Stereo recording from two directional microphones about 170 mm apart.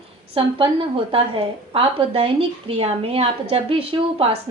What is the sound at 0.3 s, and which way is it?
A woman's voice, 30° right (ahead or behind).